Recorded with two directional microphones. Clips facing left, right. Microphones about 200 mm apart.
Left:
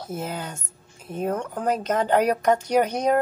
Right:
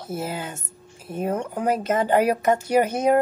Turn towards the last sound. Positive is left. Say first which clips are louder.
# right 2 dB
turn(degrees=-5)  # may be behind; listen again after turning